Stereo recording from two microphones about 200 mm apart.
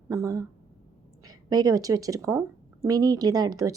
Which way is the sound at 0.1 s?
15° right (ahead or behind).